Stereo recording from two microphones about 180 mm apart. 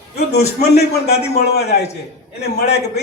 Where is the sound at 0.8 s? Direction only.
65° left (ahead or behind).